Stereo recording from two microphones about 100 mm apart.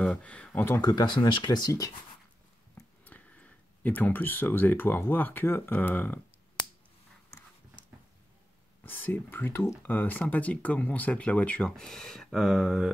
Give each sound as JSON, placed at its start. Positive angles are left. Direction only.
{"t": 0.0, "sound": "a sound", "side_deg": 10}
{"t": 0.7, "sound": "speech", "side_deg": 45}
{"t": 3.1, "sound": "speech", "side_deg": 15}
{"t": 8.8, "sound": "speech", "side_deg": 20}